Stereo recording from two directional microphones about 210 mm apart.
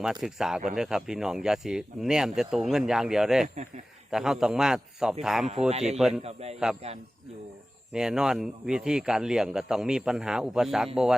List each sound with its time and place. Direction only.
0.0 s speech: centre (ahead or behind)
5.6 s speech: 30° right (ahead or behind)
6.0 s speech: centre (ahead or behind)
6.2 s a man's voice: 30° right (ahead or behind)
7.9 s speech: 5° right (ahead or behind)